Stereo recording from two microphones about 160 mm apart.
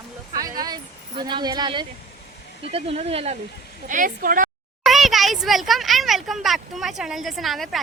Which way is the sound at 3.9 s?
55° right (ahead or behind).